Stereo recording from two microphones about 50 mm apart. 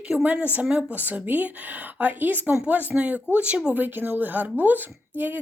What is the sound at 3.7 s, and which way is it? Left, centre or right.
A woman's voice, right.